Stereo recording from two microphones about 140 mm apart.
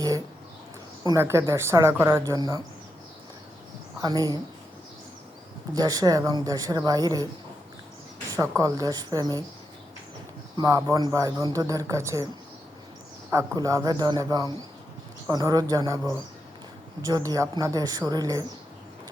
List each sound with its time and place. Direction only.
1.0 s speech: 20° right (ahead or behind)
4.0 s speech: 25° right (ahead or behind)
5.7 s speech: 25° right (ahead or behind)
8.4 s speech: 25° right (ahead or behind)
10.6 s speech: 25° right (ahead or behind)
13.3 s speech: 20° right (ahead or behind)